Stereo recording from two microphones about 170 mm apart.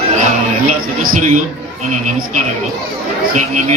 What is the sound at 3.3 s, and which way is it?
Speech, 45° right (ahead or behind).